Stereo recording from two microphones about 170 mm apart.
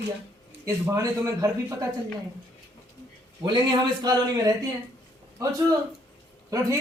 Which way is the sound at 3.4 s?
25° right (ahead or behind).